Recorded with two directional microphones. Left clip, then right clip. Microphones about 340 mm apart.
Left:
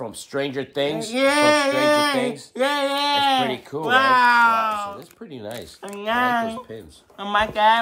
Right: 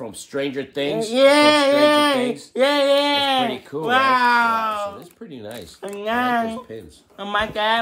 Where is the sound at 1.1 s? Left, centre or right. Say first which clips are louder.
Right 4 dB; centre.